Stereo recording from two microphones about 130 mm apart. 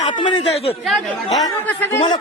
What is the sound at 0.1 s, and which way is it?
Speech, 40° left (ahead or behind).